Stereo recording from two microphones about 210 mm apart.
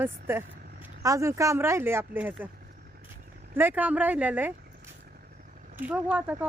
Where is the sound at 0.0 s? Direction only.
10° right (ahead or behind).